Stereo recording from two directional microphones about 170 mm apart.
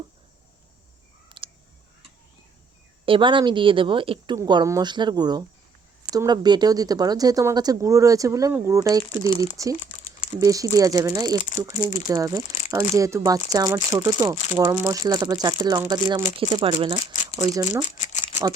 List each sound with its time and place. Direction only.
1.3 s a sound: 30° right (ahead or behind)
3.1 s speech: 30° right (ahead or behind)
17.8 s rattle: 45° left (ahead or behind)